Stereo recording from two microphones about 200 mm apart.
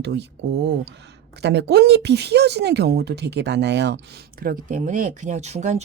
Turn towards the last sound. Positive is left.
turn(degrees=-35)  # may be behind; listen again after turning